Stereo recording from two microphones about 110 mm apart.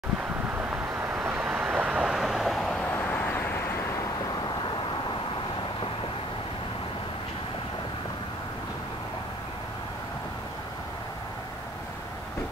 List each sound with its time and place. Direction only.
0.6 s vehicle: 15° right (ahead or behind); by 2.9 s 5° left (ahead or behind)
2.9 s vehicle: 20° left (ahead or behind)